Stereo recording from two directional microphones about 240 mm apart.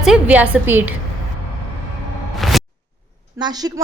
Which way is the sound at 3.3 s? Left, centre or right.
Centre.